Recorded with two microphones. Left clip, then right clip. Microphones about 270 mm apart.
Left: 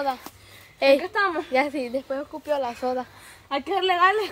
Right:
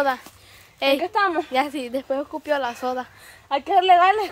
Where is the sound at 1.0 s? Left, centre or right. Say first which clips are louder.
Right 3 dB; right.